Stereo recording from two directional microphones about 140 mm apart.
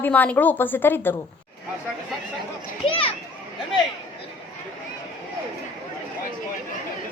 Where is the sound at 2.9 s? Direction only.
40° left (ahead or behind).